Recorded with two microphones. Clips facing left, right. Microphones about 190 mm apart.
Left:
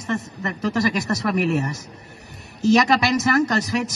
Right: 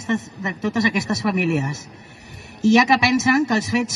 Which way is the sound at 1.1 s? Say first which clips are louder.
Right 1 dB; 10° right (ahead or behind).